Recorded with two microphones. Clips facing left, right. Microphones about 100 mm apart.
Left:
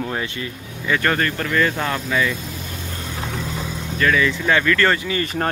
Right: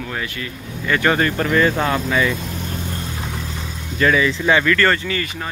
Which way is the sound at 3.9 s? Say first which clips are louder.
Right 2 dB; 20° right (ahead or behind).